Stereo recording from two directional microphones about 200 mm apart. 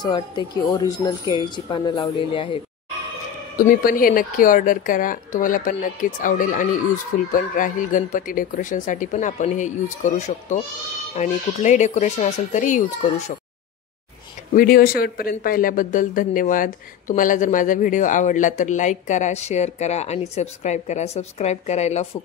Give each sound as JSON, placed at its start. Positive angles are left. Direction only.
{"t": 0.0, "sound": "speech", "side_deg": 20}
{"t": 3.5, "sound": "a woman's voice", "side_deg": 45}
{"t": 14.5, "sound": "speech", "side_deg": 45}